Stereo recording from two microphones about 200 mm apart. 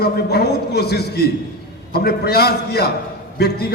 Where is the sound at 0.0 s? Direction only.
55° left (ahead or behind).